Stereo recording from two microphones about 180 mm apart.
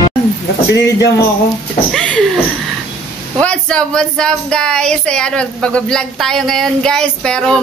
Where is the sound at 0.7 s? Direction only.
70° left (ahead or behind).